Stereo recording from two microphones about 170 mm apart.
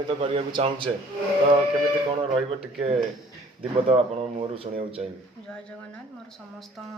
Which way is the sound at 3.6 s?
35° right (ahead or behind).